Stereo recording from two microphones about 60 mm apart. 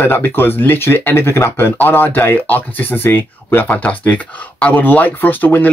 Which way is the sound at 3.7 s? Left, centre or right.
Left.